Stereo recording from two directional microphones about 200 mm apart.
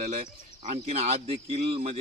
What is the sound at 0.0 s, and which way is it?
Speech, 35° right (ahead or behind).